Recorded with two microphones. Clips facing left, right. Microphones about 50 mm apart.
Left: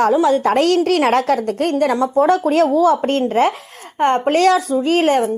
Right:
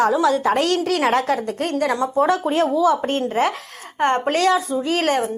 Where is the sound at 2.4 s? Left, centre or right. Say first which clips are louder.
Left 5 dB; left.